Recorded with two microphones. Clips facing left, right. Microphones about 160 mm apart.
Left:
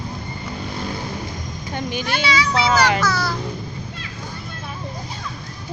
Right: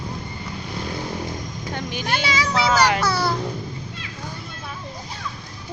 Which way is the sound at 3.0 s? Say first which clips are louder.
Even; 30° right (ahead or behind).